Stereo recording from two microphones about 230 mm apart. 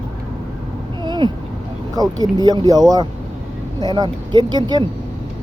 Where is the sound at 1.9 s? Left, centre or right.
Centre.